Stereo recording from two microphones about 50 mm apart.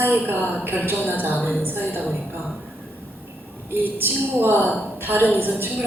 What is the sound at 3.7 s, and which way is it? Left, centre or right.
A woman's voice, right.